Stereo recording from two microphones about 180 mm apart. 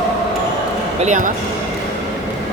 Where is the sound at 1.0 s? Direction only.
40° right (ahead or behind).